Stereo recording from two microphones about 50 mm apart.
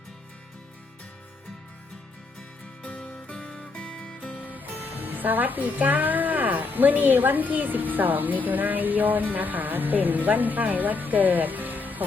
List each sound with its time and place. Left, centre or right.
2.8 s music: left
4.4 s speech: right